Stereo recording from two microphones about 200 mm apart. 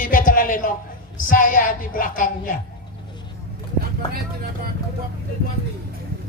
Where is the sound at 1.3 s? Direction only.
40° left (ahead or behind).